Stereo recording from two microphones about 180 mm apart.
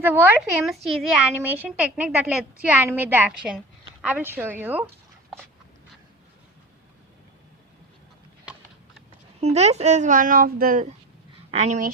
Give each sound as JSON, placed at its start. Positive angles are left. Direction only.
{"t": 0.0, "sound": "a woman's voice", "side_deg": -10}
{"t": 9.4, "sound": "speech", "side_deg": -35}
{"t": 11.5, "sound": "speech", "side_deg": -40}